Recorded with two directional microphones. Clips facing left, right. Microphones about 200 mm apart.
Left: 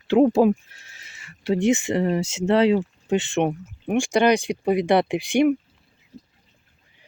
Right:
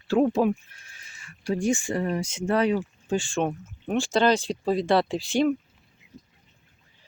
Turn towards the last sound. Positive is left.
turn(degrees=15)  # may be behind; listen again after turning